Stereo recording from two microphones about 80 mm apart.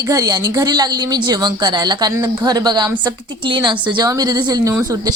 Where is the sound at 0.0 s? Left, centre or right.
Right.